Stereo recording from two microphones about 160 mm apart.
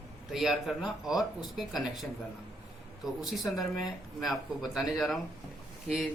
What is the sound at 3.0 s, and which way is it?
Speech, centre (ahead or behind).